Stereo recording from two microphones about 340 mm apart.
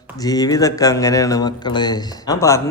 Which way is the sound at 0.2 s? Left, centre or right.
Centre.